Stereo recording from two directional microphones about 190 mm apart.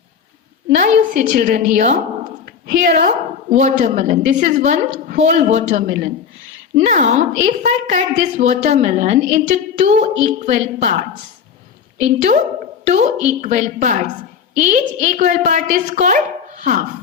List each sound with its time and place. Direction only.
0.7 s a woman's voice: 40° right (ahead or behind)